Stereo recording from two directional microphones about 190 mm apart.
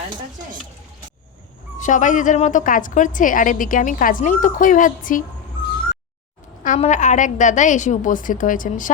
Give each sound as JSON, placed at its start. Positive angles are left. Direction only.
{"t": 1.8, "sound": "a woman's voice", "side_deg": 40}
{"t": 6.6, "sound": "a woman's voice", "side_deg": 40}